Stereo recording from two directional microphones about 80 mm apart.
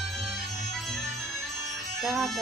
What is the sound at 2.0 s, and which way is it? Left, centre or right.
Speech, centre.